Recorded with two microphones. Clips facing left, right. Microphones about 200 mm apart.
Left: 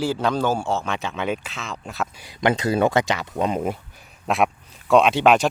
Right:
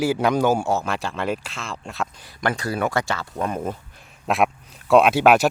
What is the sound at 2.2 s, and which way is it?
Speech, 20° left (ahead or behind).